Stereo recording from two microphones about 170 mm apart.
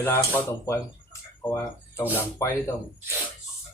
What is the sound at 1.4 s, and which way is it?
Speech, 15° left (ahead or behind).